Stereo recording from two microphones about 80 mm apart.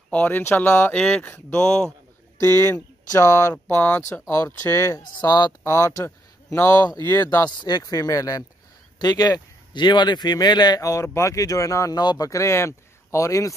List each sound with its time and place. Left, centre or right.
0.1 s speech: left
0.9 s speech: centre
2.3 s speech: left
3.6 s speech: left
4.1 s speech: left
5.6 s speech: left
7.2 s speech: left
7.5 s speech: left
7.8 s speech: left
10.8 s speech: left
12.0 s speech: left
12.3 s speech: left